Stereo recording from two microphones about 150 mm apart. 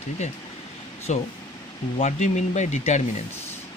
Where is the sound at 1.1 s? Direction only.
50° left (ahead or behind).